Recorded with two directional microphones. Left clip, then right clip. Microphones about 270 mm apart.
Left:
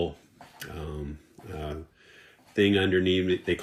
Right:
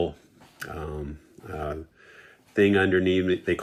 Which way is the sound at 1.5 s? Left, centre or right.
Centre.